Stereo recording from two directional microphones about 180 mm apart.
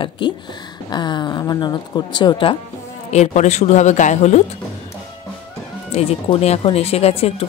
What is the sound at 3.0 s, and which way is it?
Speech, 40° left (ahead or behind).